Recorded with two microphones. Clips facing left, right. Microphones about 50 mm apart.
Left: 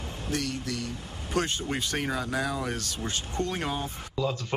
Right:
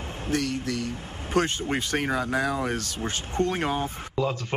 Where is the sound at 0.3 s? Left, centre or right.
Right.